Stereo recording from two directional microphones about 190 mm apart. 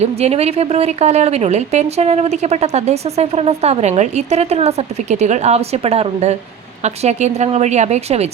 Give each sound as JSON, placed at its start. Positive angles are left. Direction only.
{"t": 0.0, "sound": "a woman's voice", "side_deg": -35}